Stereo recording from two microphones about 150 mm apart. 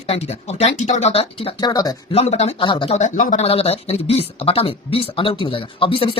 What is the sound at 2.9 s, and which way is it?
Speech, 55° left (ahead or behind).